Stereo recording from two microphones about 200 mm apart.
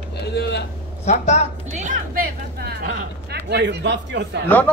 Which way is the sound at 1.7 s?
40° right (ahead or behind).